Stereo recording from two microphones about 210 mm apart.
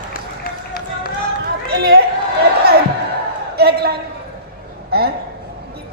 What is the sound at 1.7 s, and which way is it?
Run, 45° right (ahead or behind).